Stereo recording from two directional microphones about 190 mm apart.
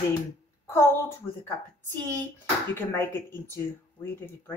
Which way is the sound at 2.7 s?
10° left (ahead or behind).